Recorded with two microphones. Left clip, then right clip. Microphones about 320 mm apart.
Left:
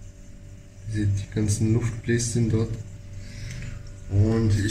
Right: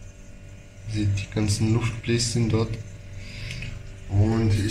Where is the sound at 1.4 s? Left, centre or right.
Centre.